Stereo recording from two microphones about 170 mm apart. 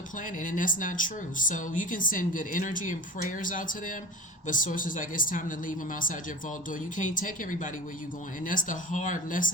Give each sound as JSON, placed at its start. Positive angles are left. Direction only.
{"t": 0.4, "sound": "speech", "side_deg": 50}